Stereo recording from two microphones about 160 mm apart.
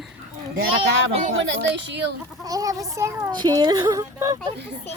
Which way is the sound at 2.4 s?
20° right (ahead or behind).